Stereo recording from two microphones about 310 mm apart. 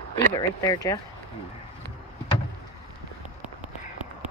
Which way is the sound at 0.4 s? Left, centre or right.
Centre.